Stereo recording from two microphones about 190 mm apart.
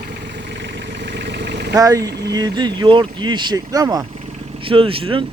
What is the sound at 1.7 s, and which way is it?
Speech, 15° right (ahead or behind).